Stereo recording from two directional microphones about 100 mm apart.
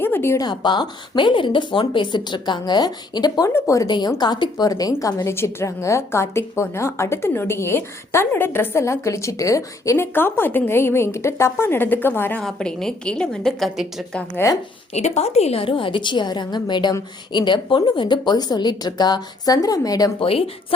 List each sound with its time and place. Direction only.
0.0 s a sound: 25° left (ahead or behind)
0.3 s speech: 45° left (ahead or behind)
3.5 s speech: 30° left (ahead or behind)
3.8 s a woman's voice: 50° left (ahead or behind); by 12.4 s 20° left (ahead or behind)
12.4 s a woman's voice: 5° left (ahead or behind)
14.4 s a woman's voice: 25° left (ahead or behind)
14.9 s a woman's voice: 90° left; by 20.1 s 40° left (ahead or behind)
20.1 s a woman's voice: 70° left (ahead or behind)